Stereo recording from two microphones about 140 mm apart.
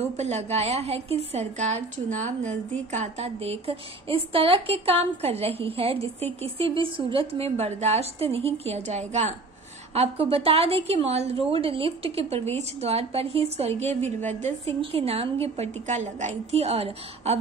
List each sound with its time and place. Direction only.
0.0 s a woman's voice: 50° right (ahead or behind)
9.9 s a woman's voice: 45° right (ahead or behind)
14.8 s a woman's voice: 45° right (ahead or behind)